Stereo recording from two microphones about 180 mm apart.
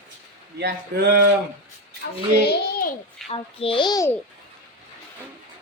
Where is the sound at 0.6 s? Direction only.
60° right (ahead or behind).